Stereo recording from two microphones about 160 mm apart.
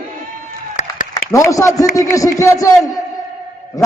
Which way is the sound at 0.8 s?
45° left (ahead or behind).